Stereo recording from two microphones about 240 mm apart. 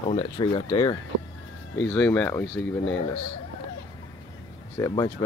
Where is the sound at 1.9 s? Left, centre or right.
Centre.